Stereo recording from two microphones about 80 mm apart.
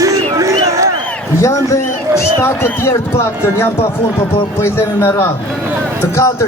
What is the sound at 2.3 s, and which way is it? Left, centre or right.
Speech, left.